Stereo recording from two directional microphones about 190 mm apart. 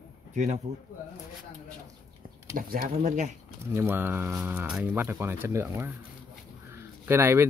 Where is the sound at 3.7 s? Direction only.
10° right (ahead or behind).